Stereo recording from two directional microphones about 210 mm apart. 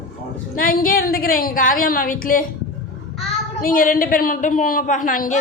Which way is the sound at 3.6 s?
40° left (ahead or behind).